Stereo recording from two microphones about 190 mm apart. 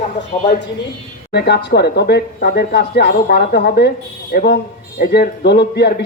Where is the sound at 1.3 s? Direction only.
60° left (ahead or behind).